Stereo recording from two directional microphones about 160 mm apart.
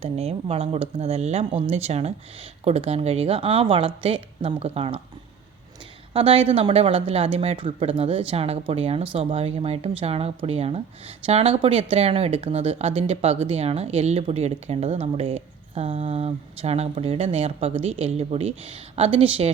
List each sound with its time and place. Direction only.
0.0 s speech: 40° right (ahead or behind)
6.1 s speech: 35° right (ahead or behind)